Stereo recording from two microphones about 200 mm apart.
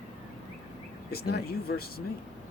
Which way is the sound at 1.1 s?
50° left (ahead or behind).